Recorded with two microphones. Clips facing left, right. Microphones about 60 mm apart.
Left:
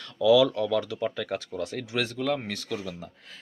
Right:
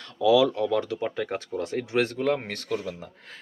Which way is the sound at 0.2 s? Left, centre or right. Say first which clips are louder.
Even; right.